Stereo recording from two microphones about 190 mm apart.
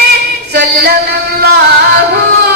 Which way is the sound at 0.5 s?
55° right (ahead or behind).